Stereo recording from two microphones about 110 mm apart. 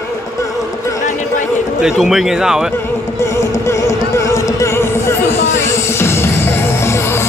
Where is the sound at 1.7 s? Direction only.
5° right (ahead or behind).